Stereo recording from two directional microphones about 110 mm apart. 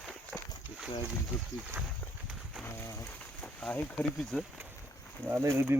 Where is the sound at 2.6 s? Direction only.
25° left (ahead or behind).